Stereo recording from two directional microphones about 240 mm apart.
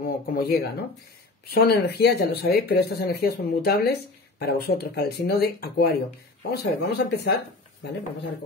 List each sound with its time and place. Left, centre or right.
0.0 s speech: left